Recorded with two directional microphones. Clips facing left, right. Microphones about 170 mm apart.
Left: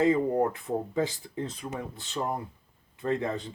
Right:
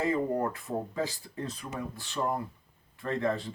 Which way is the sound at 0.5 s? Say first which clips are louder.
Left 4 dB; 20° left (ahead or behind).